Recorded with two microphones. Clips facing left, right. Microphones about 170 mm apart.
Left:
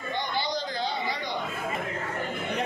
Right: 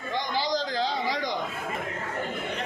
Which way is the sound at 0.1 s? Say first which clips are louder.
Right 2 dB; 90° right.